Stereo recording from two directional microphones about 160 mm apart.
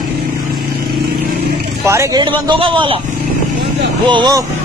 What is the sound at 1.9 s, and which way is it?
Speech, 20° right (ahead or behind).